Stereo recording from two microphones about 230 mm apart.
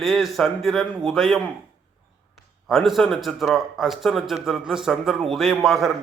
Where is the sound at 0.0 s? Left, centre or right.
Centre.